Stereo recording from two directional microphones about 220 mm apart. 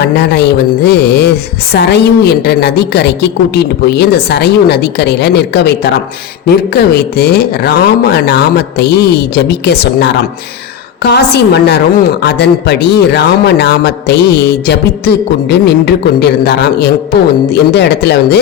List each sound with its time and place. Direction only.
0.0 s a man's voice: 50° left (ahead or behind)